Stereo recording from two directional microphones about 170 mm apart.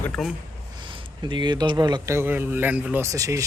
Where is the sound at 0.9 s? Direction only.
25° right (ahead or behind).